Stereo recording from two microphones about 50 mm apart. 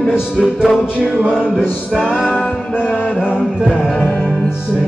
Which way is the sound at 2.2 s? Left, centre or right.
Left.